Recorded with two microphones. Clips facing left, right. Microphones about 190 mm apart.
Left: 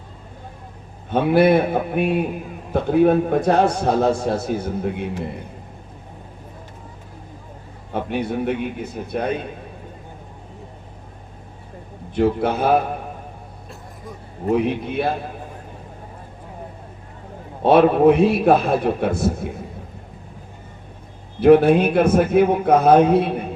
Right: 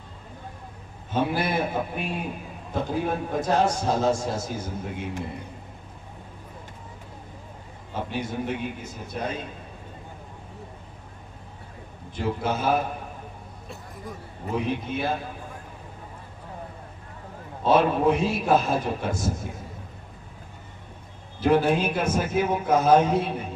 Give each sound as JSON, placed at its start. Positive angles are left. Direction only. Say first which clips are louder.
{"t": 1.1, "sound": "a man's voice", "louder": "left 10 dB", "side_deg": 60}
{"t": 8.1, "sound": "a man's voice", "louder": "left 7 dB", "side_deg": 60}
{"t": 12.1, "sound": "a man's voice", "louder": "left 8 dB", "side_deg": 60}
{"t": 13.7, "sound": "a sound", "louder": "even", "side_deg": 0}
{"t": 14.5, "sound": "a man's voice", "louder": "left 7 dB", "side_deg": 60}
{"t": 17.6, "sound": "a man's voice", "louder": "left 7 dB", "side_deg": 60}
{"t": 21.4, "sound": "a man's voice", "louder": "left 9 dB", "side_deg": 60}